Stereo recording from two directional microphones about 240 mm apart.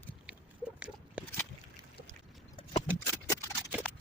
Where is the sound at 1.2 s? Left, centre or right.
Centre.